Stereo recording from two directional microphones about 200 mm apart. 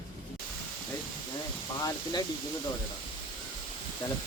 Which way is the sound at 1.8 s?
20° left (ahead or behind).